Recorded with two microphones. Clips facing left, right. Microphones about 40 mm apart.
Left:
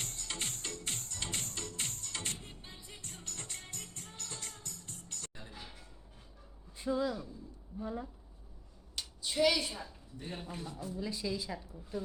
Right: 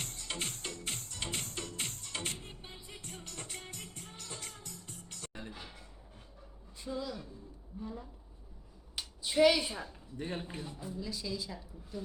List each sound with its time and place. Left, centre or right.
0.0 s music: centre
5.3 s music: right
6.7 s speech: left
9.0 s a sound: centre
10.4 s a man's voice: centre
11.0 s a woman's voice: centre